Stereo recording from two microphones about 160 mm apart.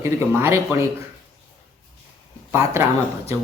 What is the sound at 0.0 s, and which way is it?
Speech, 15° right (ahead or behind).